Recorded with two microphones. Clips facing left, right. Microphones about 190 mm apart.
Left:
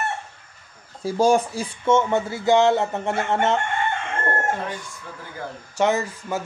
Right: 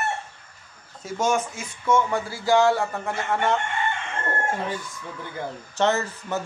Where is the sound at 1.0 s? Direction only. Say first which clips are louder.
Left 6 dB; 30° left (ahead or behind).